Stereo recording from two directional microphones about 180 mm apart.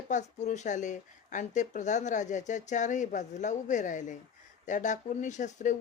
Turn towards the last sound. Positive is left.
turn(degrees=40)  # may be behind; listen again after turning